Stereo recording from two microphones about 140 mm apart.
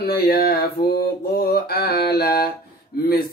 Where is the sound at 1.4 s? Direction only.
90° left.